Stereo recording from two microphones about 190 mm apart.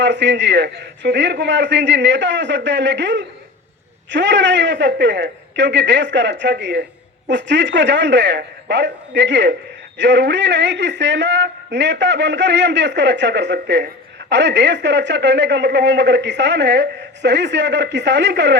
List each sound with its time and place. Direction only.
0.0 s speech: 70° right (ahead or behind)